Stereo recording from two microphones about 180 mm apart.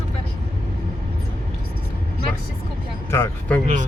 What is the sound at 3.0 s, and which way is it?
Speech, 15° left (ahead or behind).